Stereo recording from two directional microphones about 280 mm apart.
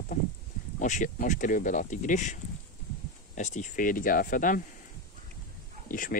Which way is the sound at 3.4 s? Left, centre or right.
Left.